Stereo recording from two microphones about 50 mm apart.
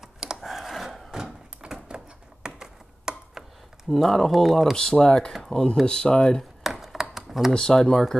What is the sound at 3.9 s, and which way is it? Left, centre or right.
Speech, centre.